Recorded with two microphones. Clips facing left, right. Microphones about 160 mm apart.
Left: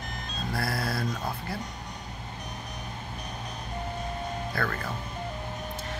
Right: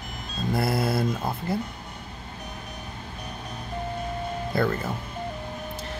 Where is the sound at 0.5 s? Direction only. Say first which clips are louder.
Right 7 dB; 20° right (ahead or behind).